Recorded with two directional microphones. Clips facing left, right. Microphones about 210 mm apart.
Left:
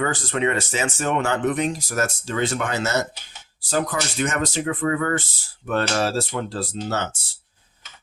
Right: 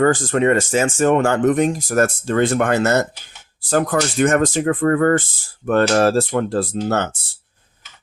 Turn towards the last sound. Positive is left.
turn(degrees=-55)  # may be behind; listen again after turning